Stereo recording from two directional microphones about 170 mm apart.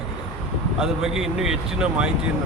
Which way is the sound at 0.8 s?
Centre (ahead or behind).